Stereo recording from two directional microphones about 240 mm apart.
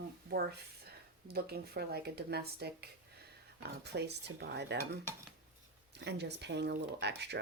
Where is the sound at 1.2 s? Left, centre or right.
Right.